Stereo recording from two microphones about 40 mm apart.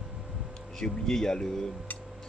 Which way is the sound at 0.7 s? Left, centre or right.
Centre.